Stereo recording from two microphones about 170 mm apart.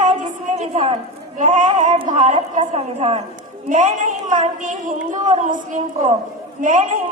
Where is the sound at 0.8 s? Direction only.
45° right (ahead or behind).